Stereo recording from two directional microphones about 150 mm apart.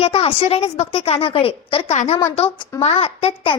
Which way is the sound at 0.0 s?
40° left (ahead or behind).